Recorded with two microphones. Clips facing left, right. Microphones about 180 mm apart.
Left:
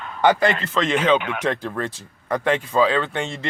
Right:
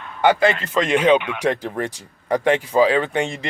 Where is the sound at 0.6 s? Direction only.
10° right (ahead or behind).